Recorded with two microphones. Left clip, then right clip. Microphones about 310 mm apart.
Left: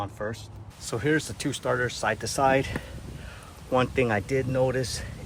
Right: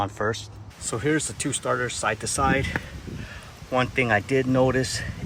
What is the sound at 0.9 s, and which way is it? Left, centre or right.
Speech, centre.